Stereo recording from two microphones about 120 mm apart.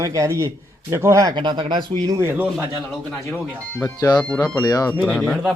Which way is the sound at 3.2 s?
20° left (ahead or behind).